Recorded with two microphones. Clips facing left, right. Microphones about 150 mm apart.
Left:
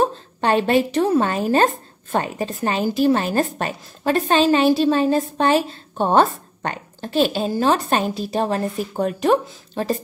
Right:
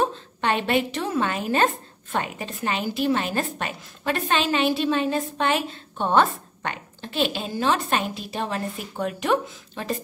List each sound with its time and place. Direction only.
0.0 s a woman's voice: 40° left (ahead or behind)